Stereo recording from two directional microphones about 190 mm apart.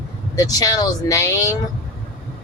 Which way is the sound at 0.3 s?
20° left (ahead or behind).